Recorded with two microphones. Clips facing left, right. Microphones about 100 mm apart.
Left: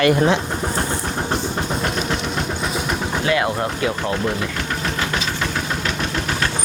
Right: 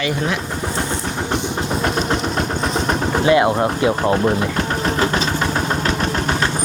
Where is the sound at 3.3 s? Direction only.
25° right (ahead or behind).